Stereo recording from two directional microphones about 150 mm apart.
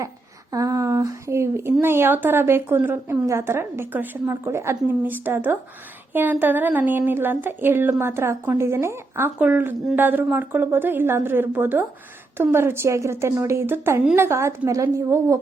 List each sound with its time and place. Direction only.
0.5 s a woman's voice: 20° right (ahead or behind)